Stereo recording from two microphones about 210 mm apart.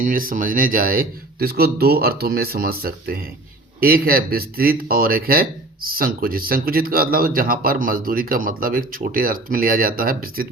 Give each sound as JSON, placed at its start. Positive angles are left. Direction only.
{"t": 0.0, "sound": "speech", "side_deg": -40}